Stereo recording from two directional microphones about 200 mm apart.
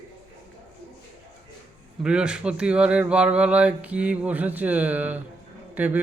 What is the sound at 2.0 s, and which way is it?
Speech, 5° right (ahead or behind).